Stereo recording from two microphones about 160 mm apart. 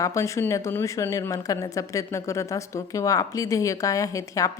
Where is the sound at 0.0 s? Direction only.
20° left (ahead or behind).